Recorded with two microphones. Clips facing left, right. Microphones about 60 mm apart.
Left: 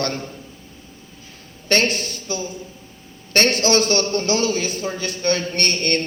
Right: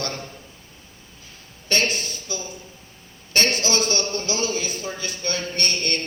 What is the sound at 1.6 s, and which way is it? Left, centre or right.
A man's voice, left.